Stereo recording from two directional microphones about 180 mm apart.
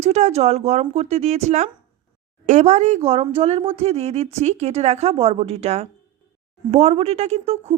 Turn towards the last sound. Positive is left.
turn(degrees=-35)  # may be behind; listen again after turning